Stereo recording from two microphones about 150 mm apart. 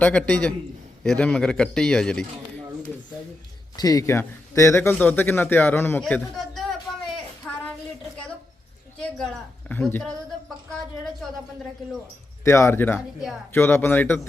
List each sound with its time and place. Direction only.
0.0 s a man's voice: 10° left (ahead or behind)
3.8 s a man's voice: 25° left (ahead or behind); by 6.7 s centre (ahead or behind)
9.6 s a man's voice: 10° left (ahead or behind)
12.5 s a man's voice: 15° left (ahead or behind)